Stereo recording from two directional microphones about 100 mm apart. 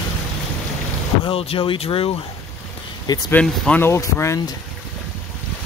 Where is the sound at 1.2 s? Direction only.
70° left (ahead or behind).